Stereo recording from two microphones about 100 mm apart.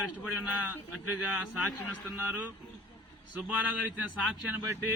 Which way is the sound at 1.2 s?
10° right (ahead or behind).